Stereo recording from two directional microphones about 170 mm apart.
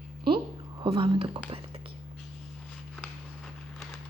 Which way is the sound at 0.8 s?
30° right (ahead or behind).